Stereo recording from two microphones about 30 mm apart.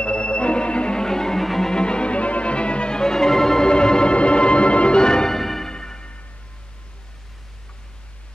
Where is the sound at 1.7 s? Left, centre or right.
Left.